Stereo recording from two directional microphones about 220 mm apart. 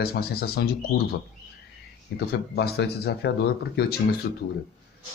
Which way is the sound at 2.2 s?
50° left (ahead or behind).